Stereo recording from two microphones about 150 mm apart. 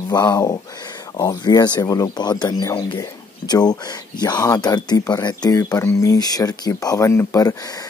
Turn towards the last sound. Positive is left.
turn(degrees=25)  # may be behind; listen again after turning